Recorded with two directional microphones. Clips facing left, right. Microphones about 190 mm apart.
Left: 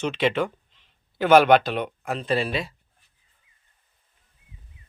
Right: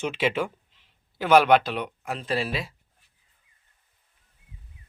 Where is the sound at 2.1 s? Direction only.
Centre (ahead or behind).